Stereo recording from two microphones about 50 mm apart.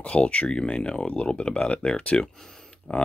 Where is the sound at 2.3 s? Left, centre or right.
Centre.